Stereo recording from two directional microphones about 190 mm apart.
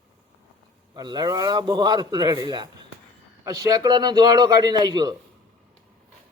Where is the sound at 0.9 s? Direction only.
20° right (ahead or behind).